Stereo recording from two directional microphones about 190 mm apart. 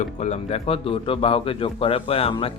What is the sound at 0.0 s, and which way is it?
Speech, 40° left (ahead or behind).